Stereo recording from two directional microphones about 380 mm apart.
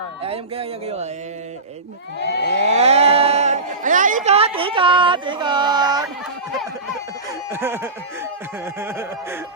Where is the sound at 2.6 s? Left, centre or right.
Centre.